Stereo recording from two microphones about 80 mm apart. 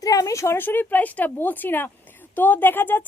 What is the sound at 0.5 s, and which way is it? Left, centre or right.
A woman's voice, left.